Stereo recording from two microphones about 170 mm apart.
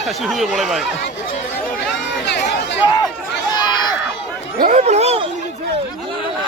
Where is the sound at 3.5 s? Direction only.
25° left (ahead or behind).